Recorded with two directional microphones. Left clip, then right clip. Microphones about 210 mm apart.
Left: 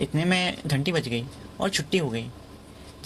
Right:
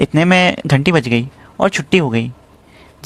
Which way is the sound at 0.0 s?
40° right (ahead or behind).